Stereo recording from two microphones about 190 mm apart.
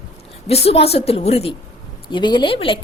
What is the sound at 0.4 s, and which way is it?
A woman's voice, 30° left (ahead or behind).